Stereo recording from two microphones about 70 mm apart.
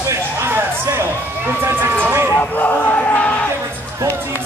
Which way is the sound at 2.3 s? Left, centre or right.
Left.